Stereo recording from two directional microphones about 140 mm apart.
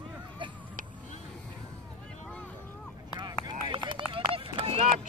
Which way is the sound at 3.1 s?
30° right (ahead or behind).